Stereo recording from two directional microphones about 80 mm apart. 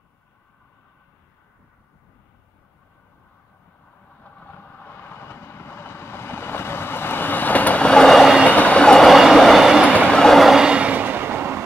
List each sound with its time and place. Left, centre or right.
4.2 s vehicle: left; by 8.4 s centre
8.5 s train: centre
10.0 s train: centre; by 11.6 s right